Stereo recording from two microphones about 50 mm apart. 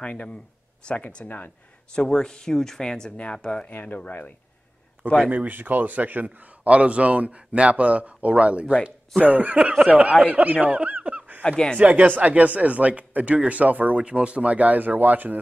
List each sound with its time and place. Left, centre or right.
0.0 s speech: left
2.0 s speech: centre
3.1 s speech: left
3.6 s speech: left
5.3 s speech: right
9.6 s speech: centre
11.4 s speech: centre
11.8 s speech: right